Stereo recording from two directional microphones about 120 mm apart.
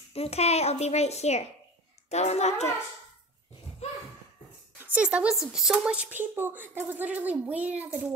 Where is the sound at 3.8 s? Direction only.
65° left (ahead or behind).